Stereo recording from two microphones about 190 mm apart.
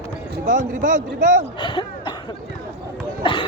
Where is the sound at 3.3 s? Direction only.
25° left (ahead or behind).